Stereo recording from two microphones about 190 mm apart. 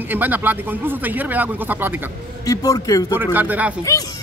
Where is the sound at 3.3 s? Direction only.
10° right (ahead or behind).